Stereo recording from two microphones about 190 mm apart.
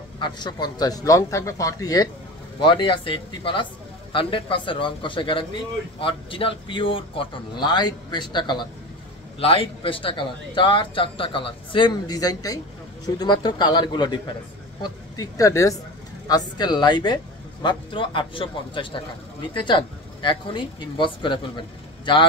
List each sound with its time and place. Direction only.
0.2 s a man's voice: 20° left (ahead or behind)